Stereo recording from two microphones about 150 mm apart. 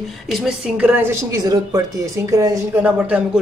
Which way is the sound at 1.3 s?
25° right (ahead or behind).